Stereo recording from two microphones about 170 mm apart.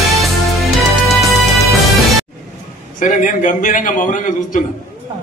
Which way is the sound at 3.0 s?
50° left (ahead or behind).